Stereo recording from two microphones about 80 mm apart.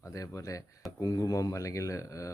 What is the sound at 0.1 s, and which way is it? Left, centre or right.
Speech, left.